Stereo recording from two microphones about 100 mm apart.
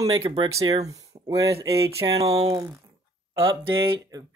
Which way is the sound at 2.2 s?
90° right.